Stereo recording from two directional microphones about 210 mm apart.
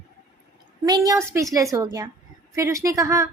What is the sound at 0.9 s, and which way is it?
A woman's voice, 15° right (ahead or behind).